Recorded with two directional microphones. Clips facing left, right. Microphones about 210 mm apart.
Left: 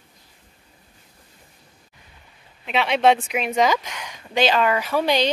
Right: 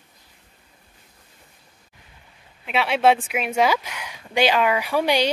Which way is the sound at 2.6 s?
5° right (ahead or behind).